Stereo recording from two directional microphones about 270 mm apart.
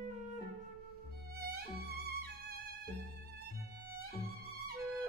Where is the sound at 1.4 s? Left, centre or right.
Right.